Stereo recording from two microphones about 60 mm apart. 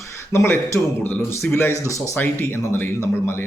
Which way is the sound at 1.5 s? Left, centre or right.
Left.